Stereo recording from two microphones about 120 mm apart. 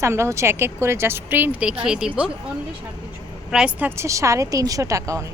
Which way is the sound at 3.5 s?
10° right (ahead or behind).